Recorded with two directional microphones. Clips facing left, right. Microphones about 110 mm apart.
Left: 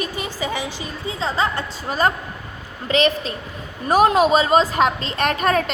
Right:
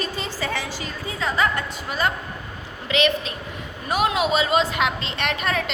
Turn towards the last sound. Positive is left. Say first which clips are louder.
# left 6 dB
turn(degrees=40)  # may be behind; listen again after turning